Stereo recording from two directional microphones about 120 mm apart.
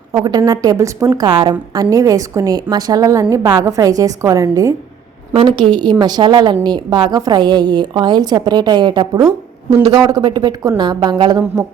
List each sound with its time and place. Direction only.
0.1 s a woman's voice: 30° right (ahead or behind)
5.3 s a woman's voice: 50° right (ahead or behind); by 11.6 s 30° right (ahead or behind)